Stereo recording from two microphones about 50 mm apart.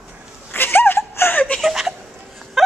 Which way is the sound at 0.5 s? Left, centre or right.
Left.